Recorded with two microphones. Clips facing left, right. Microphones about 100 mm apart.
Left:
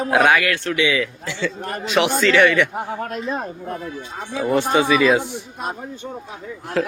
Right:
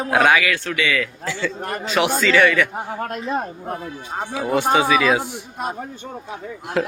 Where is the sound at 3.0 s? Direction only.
55° right (ahead or behind).